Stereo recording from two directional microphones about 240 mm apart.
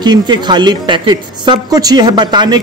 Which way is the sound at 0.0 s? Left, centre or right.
Centre.